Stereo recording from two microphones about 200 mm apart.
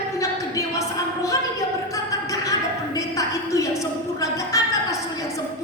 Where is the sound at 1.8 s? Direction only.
15° left (ahead or behind).